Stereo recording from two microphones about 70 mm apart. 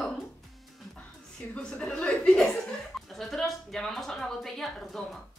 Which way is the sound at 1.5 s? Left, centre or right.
Centre.